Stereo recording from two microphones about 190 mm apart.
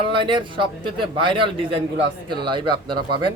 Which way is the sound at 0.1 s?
25° right (ahead or behind).